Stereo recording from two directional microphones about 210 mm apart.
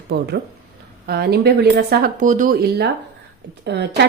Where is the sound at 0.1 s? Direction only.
50° right (ahead or behind).